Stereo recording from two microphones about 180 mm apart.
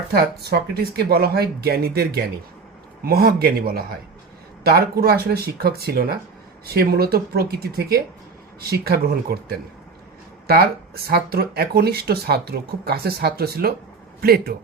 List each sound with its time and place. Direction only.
0.1 s speech: 60° right (ahead or behind)